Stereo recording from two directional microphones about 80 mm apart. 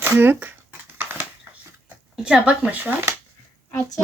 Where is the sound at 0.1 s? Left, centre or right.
Right.